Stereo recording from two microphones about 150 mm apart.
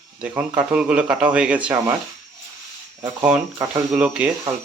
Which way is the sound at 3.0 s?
10° right (ahead or behind).